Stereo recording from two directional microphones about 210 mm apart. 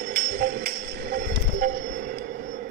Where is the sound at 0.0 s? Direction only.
45° right (ahead or behind).